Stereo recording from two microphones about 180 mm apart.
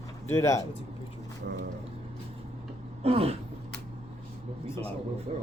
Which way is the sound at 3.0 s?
35° right (ahead or behind).